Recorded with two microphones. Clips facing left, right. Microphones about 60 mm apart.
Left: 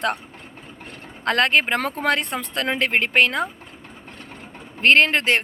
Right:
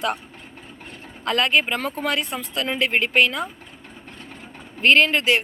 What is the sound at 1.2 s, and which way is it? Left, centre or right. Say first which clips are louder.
Speech: left 2 dB; left.